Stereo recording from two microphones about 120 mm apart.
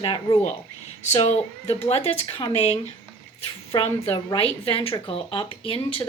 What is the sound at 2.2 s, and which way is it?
Speech, 45° left (ahead or behind).